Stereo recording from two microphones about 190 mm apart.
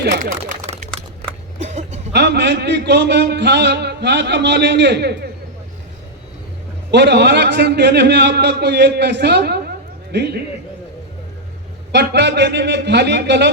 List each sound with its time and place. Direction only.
0.0 s a sound: 45° right (ahead or behind)
2.1 s a man's voice: 60° right (ahead or behind)
6.9 s a man's voice: 65° right (ahead or behind)
11.9 s a man's voice: 65° right (ahead or behind)